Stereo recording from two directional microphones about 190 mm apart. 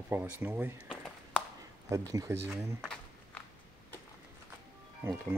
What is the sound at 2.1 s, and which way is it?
Speech, 15° right (ahead or behind).